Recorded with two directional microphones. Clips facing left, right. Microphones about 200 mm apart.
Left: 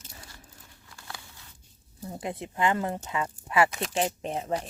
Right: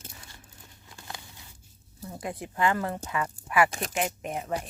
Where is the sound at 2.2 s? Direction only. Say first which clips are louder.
Even; 25° left (ahead or behind).